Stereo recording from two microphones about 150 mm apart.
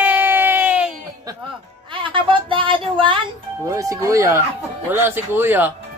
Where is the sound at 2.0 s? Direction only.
35° right (ahead or behind).